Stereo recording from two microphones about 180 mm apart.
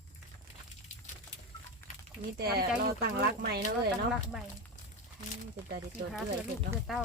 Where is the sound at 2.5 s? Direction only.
60° right (ahead or behind).